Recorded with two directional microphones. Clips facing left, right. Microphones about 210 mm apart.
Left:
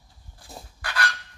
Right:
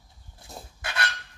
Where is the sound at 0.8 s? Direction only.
25° right (ahead or behind).